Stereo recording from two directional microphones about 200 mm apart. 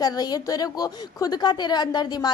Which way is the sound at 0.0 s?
20° left (ahead or behind).